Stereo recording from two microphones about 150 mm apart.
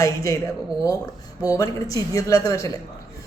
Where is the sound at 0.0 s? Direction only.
20° left (ahead or behind).